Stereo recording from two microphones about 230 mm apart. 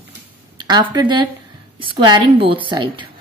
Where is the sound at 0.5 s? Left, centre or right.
Centre.